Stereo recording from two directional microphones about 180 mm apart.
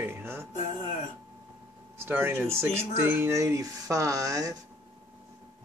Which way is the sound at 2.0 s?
10° right (ahead or behind).